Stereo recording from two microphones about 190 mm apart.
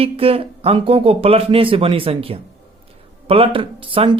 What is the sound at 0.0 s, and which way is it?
Speech, 30° right (ahead or behind).